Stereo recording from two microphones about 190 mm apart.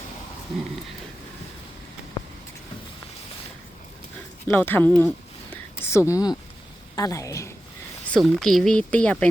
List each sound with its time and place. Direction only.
4.4 s a woman's voice: 10° left (ahead or behind)
8.1 s speech: centre (ahead or behind)